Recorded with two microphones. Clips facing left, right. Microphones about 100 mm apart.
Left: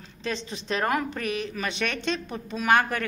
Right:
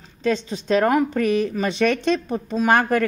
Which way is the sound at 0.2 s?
35° right (ahead or behind).